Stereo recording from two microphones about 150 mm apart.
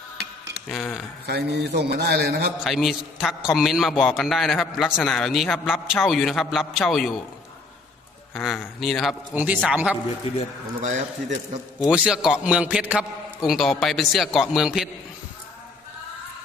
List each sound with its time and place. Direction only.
0.7 s a man's voice: centre (ahead or behind)
1.3 s a man's voice: 90° right
2.6 s a man's voice: centre (ahead or behind)
8.3 s a man's voice: 5° left (ahead or behind)
9.3 s speech: 10° right (ahead or behind)
10.8 s a man's voice: 55° right (ahead or behind)
11.9 s a man's voice: 5° right (ahead or behind)